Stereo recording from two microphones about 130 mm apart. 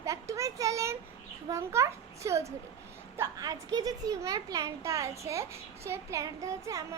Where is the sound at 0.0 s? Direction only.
25° right (ahead or behind).